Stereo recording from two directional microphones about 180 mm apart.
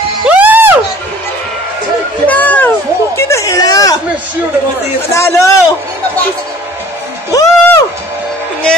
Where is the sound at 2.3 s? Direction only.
10° left (ahead or behind).